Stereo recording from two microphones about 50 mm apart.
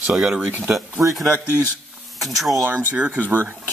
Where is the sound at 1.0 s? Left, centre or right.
Right.